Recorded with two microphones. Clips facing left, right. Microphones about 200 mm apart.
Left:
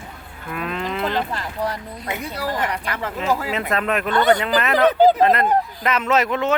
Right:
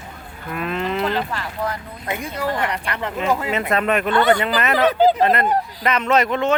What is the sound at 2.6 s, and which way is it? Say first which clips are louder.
Speech: right 1 dB; 5° left (ahead or behind).